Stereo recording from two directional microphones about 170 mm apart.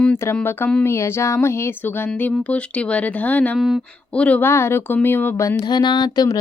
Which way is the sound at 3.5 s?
Centre (ahead or behind).